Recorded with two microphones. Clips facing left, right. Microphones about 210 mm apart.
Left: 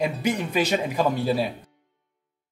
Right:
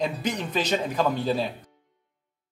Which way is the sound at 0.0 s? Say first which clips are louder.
Left 3 dB; 10° left (ahead or behind).